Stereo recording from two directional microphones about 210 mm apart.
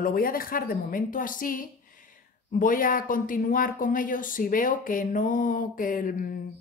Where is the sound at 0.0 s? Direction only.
45° left (ahead or behind).